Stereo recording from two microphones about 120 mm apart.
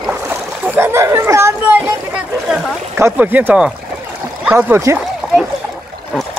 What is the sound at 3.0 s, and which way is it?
Speech, 15° right (ahead or behind).